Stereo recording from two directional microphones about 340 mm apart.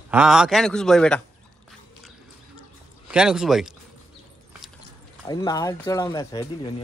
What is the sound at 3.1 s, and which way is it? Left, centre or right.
Speech, centre.